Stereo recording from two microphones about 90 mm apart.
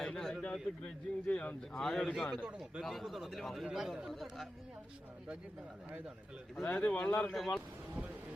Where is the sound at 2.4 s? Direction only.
10° right (ahead or behind).